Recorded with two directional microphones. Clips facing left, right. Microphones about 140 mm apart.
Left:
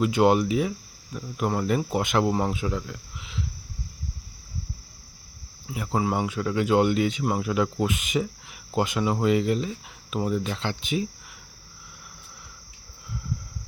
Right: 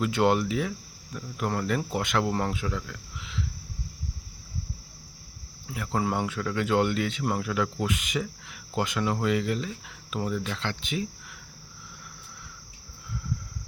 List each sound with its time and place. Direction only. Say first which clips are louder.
0.0 s speech: left 4 dB; 15° left (ahead or behind)
5.6 s speech: left 2 dB; 15° left (ahead or behind)